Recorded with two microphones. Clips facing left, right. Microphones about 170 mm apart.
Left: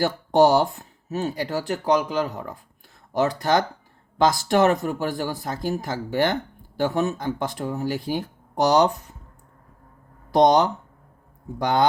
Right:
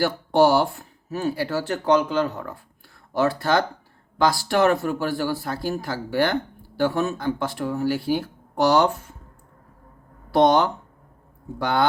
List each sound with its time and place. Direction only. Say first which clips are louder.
0.3 s speech: left 1 dB; 20° left (ahead or behind)
10.3 s speech: left 1 dB; 15° left (ahead or behind)